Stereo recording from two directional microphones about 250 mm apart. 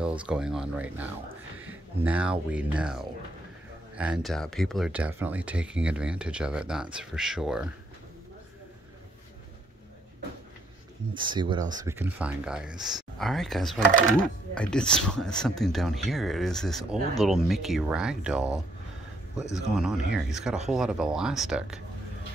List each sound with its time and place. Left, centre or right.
0.3 s speech: centre
11.1 s speech: centre